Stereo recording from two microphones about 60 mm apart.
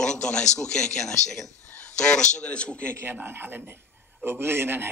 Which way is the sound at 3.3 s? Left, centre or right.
Right.